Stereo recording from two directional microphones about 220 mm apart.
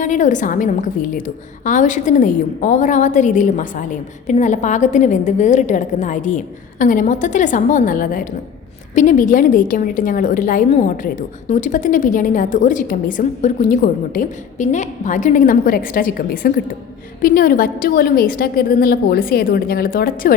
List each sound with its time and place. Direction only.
0.0 s a woman's voice: 35° left (ahead or behind)